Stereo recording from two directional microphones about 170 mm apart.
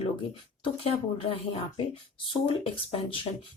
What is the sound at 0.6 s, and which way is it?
Speech, 35° left (ahead or behind).